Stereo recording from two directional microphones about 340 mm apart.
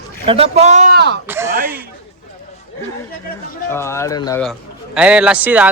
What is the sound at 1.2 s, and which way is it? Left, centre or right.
Speech, centre.